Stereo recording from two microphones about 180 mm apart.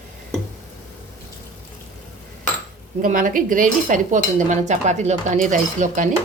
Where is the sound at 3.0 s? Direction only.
50° right (ahead or behind).